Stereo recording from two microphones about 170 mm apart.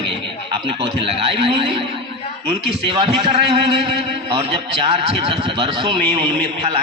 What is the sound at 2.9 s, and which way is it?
A man's voice, 30° right (ahead or behind).